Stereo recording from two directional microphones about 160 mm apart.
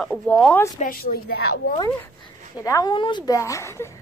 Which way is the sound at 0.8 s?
65° left (ahead or behind).